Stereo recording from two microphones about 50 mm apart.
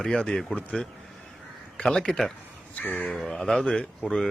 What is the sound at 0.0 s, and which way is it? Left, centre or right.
Speech, centre.